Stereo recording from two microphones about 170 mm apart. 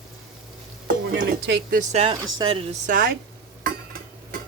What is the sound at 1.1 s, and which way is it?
Speech, 75° right (ahead or behind).